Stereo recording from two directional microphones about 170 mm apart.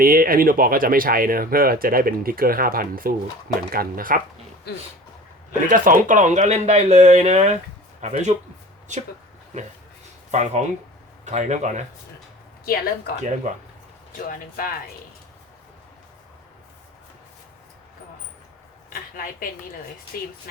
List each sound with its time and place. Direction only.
0.0 s speech: 60° right (ahead or behind)
5.6 s speech: 50° right (ahead or behind)
10.3 s speech: 40° right (ahead or behind)
12.6 s speech: 60° left (ahead or behind)
13.5 s speech: 45° right (ahead or behind)
14.1 s speech: 55° left (ahead or behind)
19.1 s speech: 55° left (ahead or behind)